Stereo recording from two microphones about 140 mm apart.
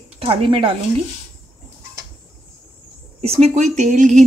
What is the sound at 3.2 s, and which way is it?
Speech, 45° right (ahead or behind).